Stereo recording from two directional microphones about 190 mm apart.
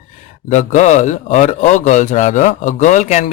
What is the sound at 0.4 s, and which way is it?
Speech, 40° left (ahead or behind).